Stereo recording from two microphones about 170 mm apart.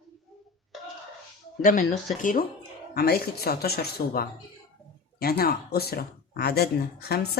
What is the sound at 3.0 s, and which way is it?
Speech, 65° left (ahead or behind).